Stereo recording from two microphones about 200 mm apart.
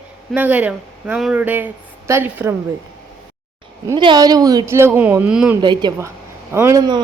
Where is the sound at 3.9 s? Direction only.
20° right (ahead or behind); by 5.6 s 5° right (ahead or behind).